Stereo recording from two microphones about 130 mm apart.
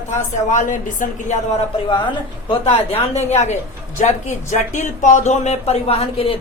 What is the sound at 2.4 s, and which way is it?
Speech, 45° left (ahead or behind).